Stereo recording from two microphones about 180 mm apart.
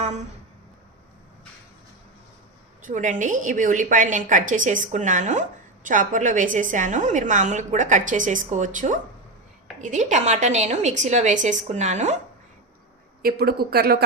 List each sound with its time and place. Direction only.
2.8 s a woman's voice: 45° right (ahead or behind)
13.2 s speech: 60° right (ahead or behind)